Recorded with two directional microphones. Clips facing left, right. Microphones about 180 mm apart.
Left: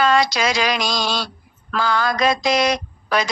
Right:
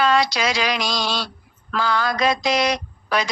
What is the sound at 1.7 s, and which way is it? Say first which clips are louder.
Speech: left 1 dB; 45° left (ahead or behind).